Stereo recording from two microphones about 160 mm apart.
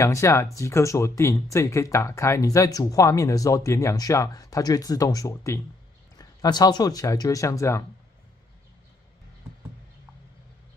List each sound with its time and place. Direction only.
0.0 s speech: 20° left (ahead or behind)